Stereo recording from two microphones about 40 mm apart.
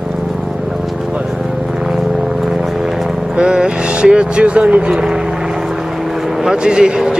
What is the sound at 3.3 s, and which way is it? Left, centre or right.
Speech, centre.